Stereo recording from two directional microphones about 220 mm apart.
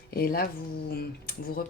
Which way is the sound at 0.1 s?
45° left (ahead or behind).